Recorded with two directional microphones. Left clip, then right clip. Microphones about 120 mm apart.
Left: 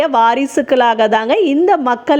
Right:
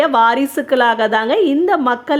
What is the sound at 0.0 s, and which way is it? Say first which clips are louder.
A woman's voice: left 1 dB; 35° left (ahead or behind).